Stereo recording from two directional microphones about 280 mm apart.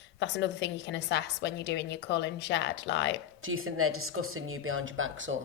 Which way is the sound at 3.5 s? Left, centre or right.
Right.